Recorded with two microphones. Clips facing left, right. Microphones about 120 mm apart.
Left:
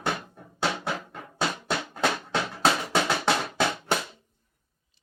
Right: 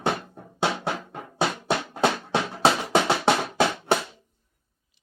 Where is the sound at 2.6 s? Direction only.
25° right (ahead or behind).